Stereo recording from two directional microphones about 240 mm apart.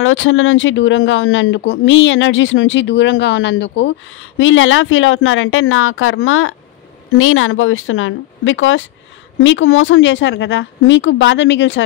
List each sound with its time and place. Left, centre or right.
0.0 s speech: left